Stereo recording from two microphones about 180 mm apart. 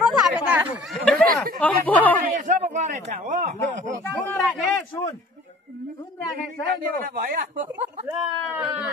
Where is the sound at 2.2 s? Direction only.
45° right (ahead or behind).